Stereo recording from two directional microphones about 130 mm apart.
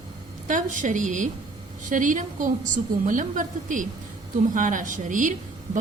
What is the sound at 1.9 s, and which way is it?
A woman's voice, 85° right.